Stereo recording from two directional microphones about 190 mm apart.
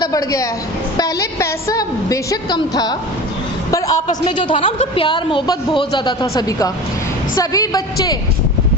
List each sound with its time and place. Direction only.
0.0 s a woman's voice: 20° left (ahead or behind)
4.3 s a woman's voice: 25° left (ahead or behind)